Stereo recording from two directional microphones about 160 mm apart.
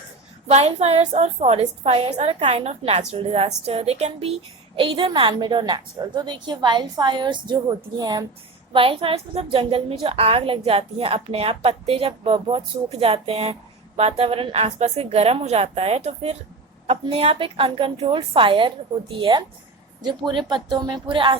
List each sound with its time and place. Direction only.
0.4 s a woman's voice: 40° right (ahead or behind)